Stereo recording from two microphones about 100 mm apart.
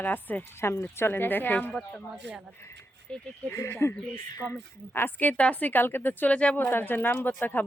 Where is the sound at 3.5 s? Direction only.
30° left (ahead or behind).